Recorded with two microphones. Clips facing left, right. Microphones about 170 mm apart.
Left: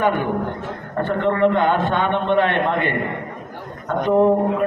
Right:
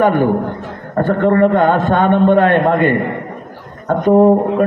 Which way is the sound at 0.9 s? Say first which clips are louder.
Right 7 dB; 45° right (ahead or behind).